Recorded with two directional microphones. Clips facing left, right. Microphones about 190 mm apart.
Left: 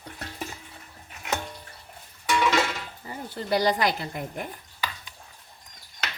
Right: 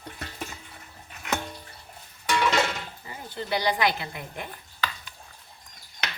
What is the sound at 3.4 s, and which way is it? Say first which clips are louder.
Speech: left 2 dB; 40° left (ahead or behind).